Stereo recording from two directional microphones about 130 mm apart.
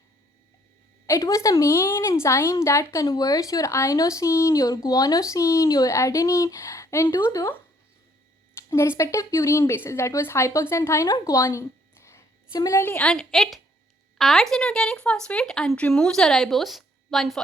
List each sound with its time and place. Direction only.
1.0 s a woman's voice: 25° left (ahead or behind)
8.5 s a sound: 20° left (ahead or behind)
9.0 s a woman's voice: 25° left (ahead or behind)
13.0 s speech: 5° left (ahead or behind)